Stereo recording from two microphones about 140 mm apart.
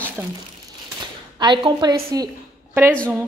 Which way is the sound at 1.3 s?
35° right (ahead or behind).